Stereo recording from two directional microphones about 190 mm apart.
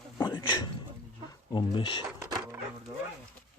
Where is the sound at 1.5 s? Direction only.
25° left (ahead or behind).